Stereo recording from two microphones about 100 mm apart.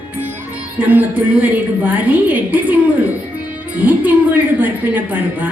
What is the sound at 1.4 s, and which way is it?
A woman's voice, 15° right (ahead or behind).